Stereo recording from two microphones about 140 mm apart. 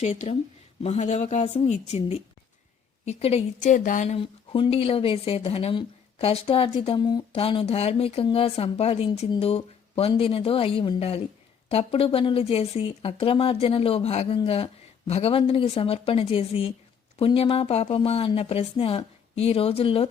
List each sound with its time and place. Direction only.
0.0 s speech: 55° left (ahead or behind)
3.6 s speech: 65° left (ahead or behind)
4.2 s speech: 40° left (ahead or behind)